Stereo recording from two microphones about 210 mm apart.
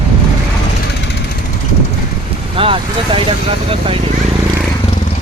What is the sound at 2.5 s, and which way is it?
Speech, 25° right (ahead or behind).